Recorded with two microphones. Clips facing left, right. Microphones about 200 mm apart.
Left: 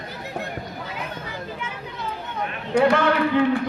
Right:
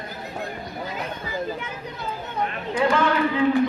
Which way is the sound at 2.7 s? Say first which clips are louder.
Left 3 dB; 65° left (ahead or behind).